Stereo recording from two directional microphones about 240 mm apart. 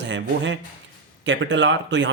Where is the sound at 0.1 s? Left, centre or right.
Right.